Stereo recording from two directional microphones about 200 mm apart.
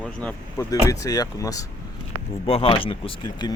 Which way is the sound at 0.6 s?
15° left (ahead or behind).